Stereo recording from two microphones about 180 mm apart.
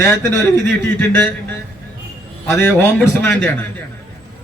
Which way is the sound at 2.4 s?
15° left (ahead or behind).